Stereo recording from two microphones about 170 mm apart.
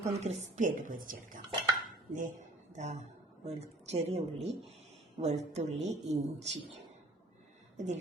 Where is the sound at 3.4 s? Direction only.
40° right (ahead or behind).